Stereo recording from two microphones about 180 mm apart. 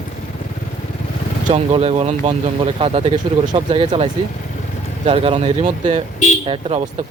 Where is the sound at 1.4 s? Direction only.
35° right (ahead or behind).